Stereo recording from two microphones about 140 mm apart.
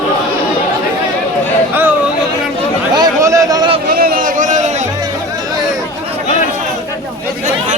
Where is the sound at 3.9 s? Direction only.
90° right; by 4.6 s 60° right (ahead or behind).